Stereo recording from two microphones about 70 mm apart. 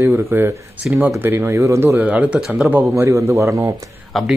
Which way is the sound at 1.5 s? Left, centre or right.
Right.